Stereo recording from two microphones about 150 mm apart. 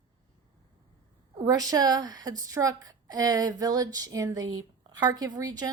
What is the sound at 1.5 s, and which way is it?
A woman's voice, 25° right (ahead or behind).